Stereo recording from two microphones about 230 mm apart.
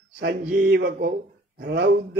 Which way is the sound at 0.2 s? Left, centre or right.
Right.